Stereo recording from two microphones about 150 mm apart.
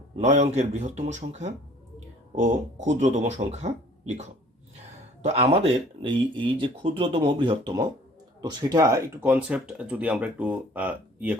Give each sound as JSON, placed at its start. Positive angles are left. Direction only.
{"t": 0.2, "sound": "speech", "side_deg": -50}
{"t": 9.3, "sound": "speech", "side_deg": -10}